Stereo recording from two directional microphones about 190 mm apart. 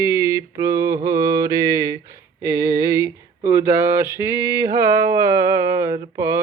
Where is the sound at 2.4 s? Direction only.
15° right (ahead or behind).